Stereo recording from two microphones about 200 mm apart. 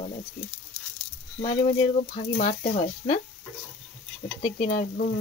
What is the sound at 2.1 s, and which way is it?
Speech, 30° left (ahead or behind).